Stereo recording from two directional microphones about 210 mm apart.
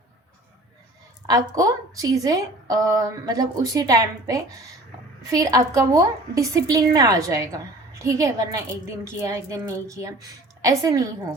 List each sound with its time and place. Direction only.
1.3 s a woman's voice: 15° right (ahead or behind)